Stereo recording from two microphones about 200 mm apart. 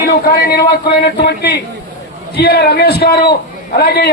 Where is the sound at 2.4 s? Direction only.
55° left (ahead or behind).